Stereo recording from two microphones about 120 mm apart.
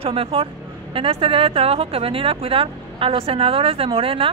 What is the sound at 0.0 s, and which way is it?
A woman's voice, 50° right (ahead or behind).